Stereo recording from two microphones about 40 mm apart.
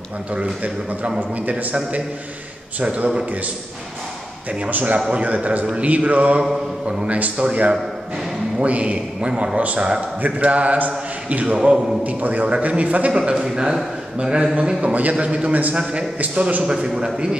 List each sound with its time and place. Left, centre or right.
2.8 s a man's voice: right
4.5 s a man's voice: right
11.5 s a man's voice: centre
12.0 s a man's voice: right; by 13.7 s centre
14.8 s a man's voice: right
16.6 s a man's voice: centre